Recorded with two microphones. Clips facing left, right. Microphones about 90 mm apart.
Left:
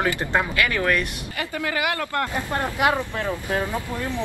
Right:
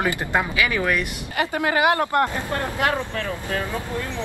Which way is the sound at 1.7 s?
25° right (ahead or behind).